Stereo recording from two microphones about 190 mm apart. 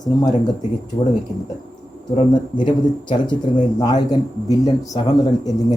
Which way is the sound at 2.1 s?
25° left (ahead or behind).